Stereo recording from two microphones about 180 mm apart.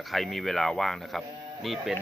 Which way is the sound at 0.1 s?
Centre (ahead or behind).